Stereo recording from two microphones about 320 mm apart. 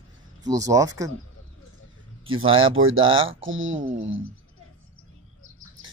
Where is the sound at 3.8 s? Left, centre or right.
Centre.